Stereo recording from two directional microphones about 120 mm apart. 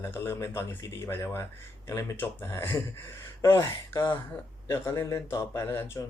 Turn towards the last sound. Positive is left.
turn(degrees=20)  # may be behind; listen again after turning